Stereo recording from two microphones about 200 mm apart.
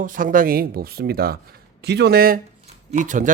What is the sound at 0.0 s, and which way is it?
Speech, 40° right (ahead or behind).